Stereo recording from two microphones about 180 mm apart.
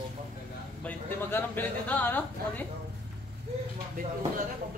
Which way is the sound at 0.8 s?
10° left (ahead or behind).